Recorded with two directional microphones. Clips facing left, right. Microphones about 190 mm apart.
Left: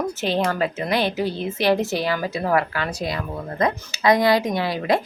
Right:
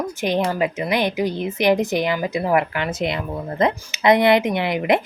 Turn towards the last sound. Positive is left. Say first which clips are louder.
# right 2 dB
turn(degrees=-20)  # may be behind; listen again after turning